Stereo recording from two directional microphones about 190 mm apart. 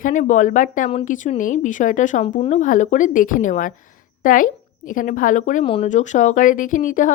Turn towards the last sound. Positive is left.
turn(degrees=45)  # may be behind; listen again after turning